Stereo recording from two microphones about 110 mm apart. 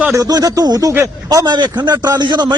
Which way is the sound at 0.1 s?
35° right (ahead or behind).